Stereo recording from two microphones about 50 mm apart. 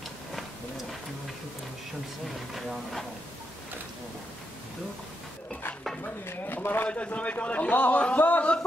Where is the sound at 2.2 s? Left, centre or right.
Centre.